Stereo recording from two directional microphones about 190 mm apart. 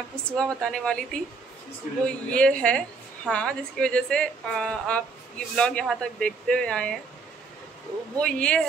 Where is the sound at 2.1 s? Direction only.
5° left (ahead or behind).